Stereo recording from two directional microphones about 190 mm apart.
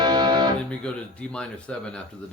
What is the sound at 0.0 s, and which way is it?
Music, 20° right (ahead or behind).